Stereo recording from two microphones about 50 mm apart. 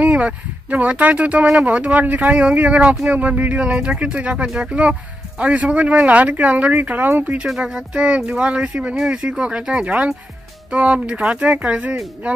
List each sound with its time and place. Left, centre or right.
0.0 s speech: right
7.6 s speech: centre